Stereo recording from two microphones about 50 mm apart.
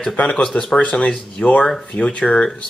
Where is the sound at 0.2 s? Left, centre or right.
Left.